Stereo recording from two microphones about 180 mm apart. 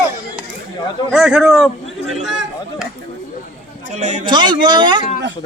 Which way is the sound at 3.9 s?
40° right (ahead or behind).